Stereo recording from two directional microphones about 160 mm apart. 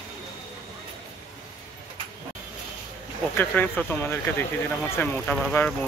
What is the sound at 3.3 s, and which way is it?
Speech, 10° left (ahead or behind).